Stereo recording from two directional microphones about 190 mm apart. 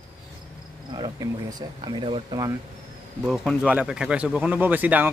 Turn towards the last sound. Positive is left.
turn(degrees=-10)  # may be behind; listen again after turning